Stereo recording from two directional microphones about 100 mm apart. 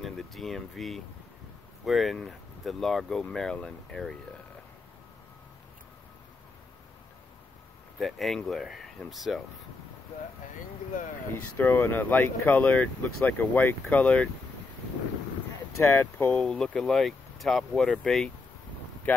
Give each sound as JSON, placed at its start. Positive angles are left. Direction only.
{"t": 0.0, "sound": "speech", "side_deg": 0}
{"t": 8.0, "sound": "speech", "side_deg": 0}
{"t": 11.5, "sound": "speech", "side_deg": 20}
{"t": 15.8, "sound": "speech", "side_deg": 25}
{"t": 16.3, "sound": "speech", "side_deg": 5}
{"t": 19.1, "sound": "speech", "side_deg": 15}